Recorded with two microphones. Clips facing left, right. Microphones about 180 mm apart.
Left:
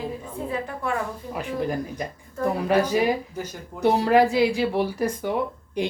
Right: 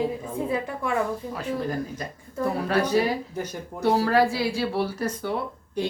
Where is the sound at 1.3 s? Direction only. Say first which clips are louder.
Left 6 dB; 15° left (ahead or behind).